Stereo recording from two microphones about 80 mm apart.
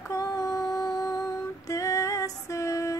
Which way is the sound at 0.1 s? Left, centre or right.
Left.